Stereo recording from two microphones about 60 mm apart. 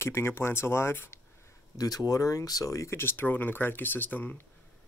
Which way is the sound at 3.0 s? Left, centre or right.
Left.